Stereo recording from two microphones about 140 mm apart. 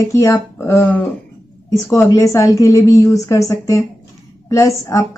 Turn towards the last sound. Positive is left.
turn(degrees=20)  # may be behind; listen again after turning